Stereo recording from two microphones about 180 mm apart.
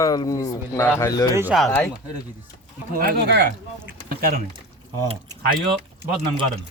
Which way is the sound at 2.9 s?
60° right (ahead or behind).